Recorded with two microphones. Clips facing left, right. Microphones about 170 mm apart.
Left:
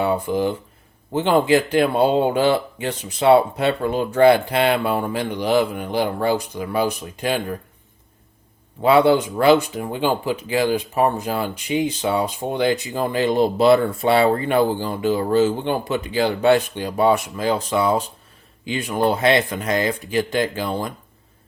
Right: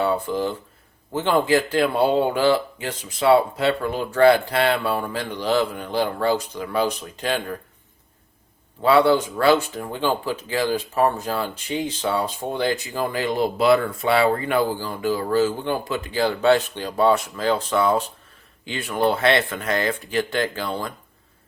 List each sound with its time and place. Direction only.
0.0 s speech: 15° left (ahead or behind)
8.8 s speech: 15° left (ahead or behind)